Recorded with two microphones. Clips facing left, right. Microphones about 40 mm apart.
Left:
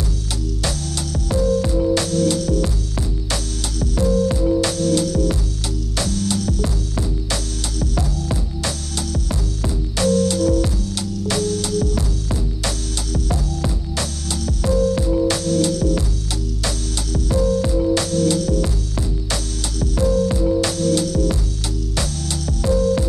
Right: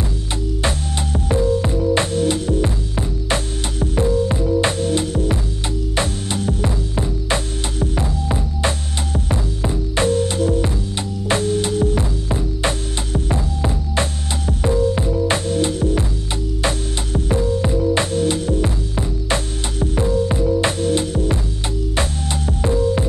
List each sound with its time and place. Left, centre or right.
0.6 s music: right
22.5 s music: right